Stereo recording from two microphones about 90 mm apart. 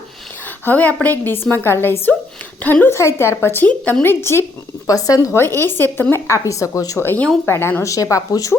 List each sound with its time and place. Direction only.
0.6 s a woman's voice: 20° left (ahead or behind)
4.9 s speech: 40° left (ahead or behind)
5.5 s speech: 25° left (ahead or behind)
7.0 s a woman's voice: 25° left (ahead or behind)